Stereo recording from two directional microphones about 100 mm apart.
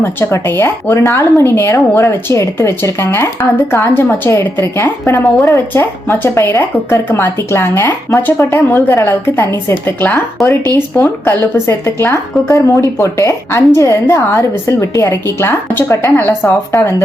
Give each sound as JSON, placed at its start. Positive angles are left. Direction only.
{"t": 0.0, "sound": "a woman's voice", "side_deg": 25}